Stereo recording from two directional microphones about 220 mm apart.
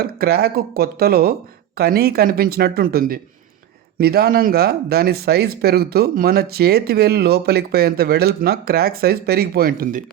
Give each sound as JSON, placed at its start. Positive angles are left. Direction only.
{"t": 0.0, "sound": "speech", "side_deg": -45}